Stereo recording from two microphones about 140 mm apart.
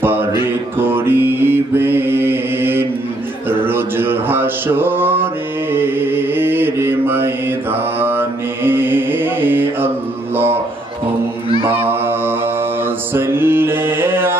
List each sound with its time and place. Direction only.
0.0 s mantra: 15° right (ahead or behind)
11.9 s mantra: 15° right (ahead or behind)
13.1 s music: 15° right (ahead or behind)